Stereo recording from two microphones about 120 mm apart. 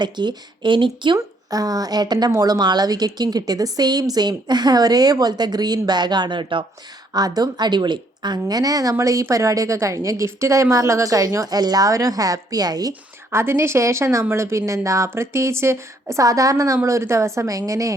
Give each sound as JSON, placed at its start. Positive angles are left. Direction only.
{"t": 0.0, "sound": "a woman's voice", "side_deg": -40}
{"t": 1.5, "sound": "a woman's voice", "side_deg": -30}
{"t": 7.1, "sound": "a woman's voice", "side_deg": -30}
{"t": 12.9, "sound": "a woman's voice", "side_deg": -20}